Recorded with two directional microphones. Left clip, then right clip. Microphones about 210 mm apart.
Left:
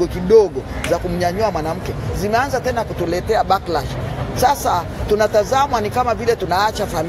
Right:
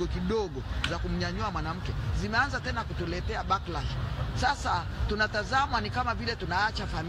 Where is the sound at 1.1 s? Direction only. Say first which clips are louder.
Left 15 dB; 35° right (ahead or behind).